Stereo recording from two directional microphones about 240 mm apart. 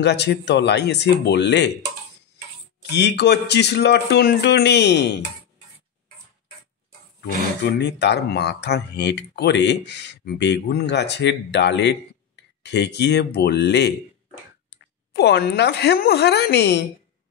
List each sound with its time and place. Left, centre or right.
0.0 s speech: left
2.9 s speech: left
7.2 s speech: left
15.1 s speech: left